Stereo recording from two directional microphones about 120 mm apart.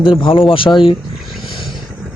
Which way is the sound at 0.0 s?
45° left (ahead or behind).